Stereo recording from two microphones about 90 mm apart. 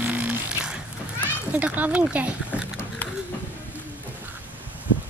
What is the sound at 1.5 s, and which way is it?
Speech, 15° right (ahead or behind).